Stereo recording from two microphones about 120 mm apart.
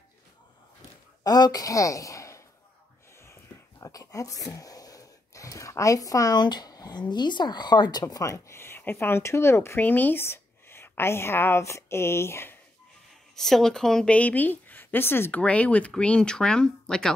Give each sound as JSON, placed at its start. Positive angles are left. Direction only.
{"t": 1.2, "sound": "speech", "side_deg": 35}
{"t": 3.8, "sound": "speech", "side_deg": 30}
{"t": 13.4, "sound": "speech", "side_deg": 5}